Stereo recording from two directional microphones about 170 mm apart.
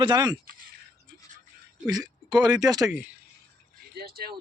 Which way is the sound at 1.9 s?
25° right (ahead or behind).